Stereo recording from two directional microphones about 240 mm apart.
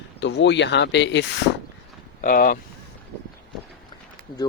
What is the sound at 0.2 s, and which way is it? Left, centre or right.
Speech, left.